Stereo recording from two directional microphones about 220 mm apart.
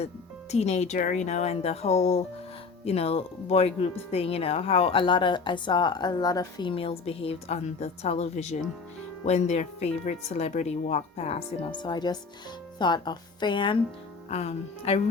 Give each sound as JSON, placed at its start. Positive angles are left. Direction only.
{"t": 0.5, "sound": "speech", "side_deg": 30}